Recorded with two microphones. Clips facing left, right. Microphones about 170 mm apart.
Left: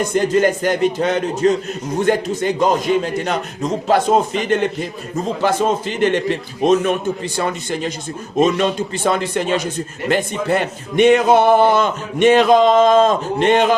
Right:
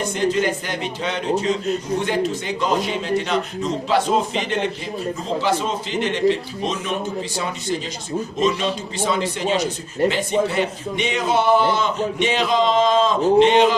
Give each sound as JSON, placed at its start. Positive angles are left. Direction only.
{"t": 0.1, "sound": "a man's voice", "side_deg": 50}